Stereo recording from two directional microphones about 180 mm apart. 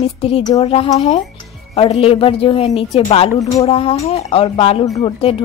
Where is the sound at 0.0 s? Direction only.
30° left (ahead or behind).